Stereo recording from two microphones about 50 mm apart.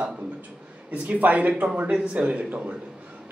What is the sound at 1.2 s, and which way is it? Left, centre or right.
A man's voice, right.